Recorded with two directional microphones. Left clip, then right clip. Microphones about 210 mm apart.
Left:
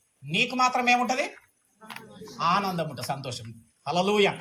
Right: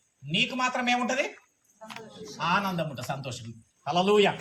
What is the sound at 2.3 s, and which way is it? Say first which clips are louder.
A man's voice: left 2 dB; 15° left (ahead or behind).